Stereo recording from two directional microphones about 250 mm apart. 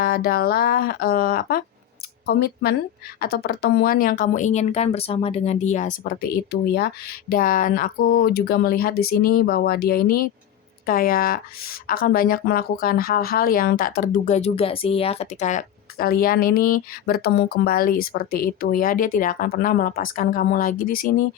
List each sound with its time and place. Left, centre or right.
0.0 s a woman's voice: left